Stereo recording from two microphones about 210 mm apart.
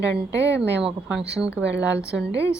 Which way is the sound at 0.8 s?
5° right (ahead or behind).